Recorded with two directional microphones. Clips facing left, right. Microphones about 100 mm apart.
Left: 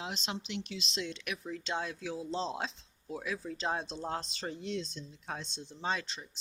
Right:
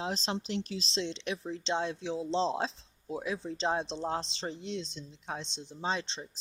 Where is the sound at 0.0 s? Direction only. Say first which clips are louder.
Right 5 dB; 35° right (ahead or behind).